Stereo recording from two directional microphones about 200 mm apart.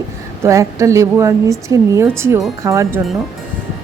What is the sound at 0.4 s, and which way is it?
A woman's voice, 15° right (ahead or behind).